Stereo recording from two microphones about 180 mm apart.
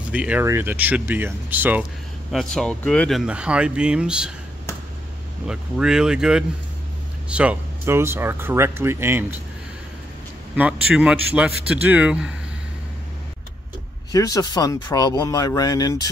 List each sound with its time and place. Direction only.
0.1 s speech: 5° right (ahead or behind)
2.3 s speech: 5° left (ahead or behind)
5.5 s speech: 5° right (ahead or behind)
10.5 s speech: 5° right (ahead or behind)
14.1 s speech: 20° left (ahead or behind)